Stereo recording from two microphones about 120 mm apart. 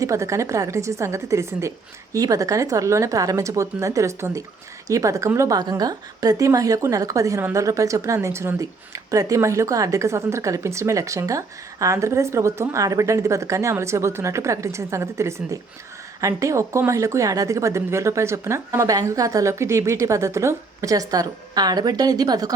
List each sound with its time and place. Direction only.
0.0 s a woman's voice: 25° right (ahead or behind)